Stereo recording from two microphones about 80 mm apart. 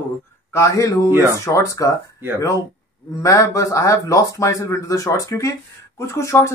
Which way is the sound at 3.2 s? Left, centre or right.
Left.